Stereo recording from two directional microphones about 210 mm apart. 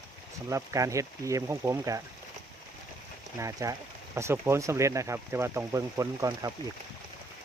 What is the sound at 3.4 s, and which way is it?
Speech, 15° right (ahead or behind).